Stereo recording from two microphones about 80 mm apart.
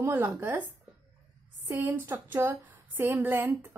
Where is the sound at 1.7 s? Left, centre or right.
Right.